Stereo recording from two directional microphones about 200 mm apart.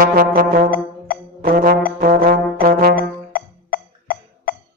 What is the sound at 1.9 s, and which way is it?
Brass instrument, 45° right (ahead or behind).